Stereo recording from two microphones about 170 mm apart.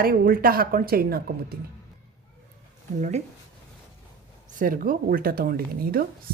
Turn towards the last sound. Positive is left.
turn(degrees=-60)  # may be behind; listen again after turning